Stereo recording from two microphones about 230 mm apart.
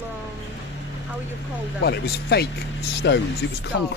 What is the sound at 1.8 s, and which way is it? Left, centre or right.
Speech, left.